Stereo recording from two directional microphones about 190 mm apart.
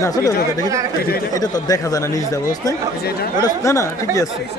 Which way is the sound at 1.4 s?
20° left (ahead or behind).